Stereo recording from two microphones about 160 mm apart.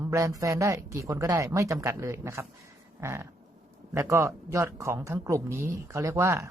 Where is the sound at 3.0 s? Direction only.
15° right (ahead or behind).